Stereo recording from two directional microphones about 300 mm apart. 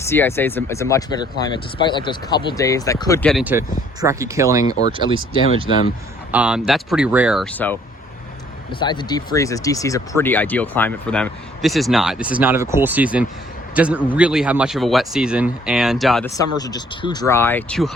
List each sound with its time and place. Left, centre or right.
0.0 s speech: centre
6.3 s speech: centre
8.8 s speech: centre
16.3 s speech: centre